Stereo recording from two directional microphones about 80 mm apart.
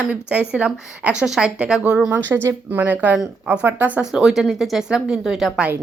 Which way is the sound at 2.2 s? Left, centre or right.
Right.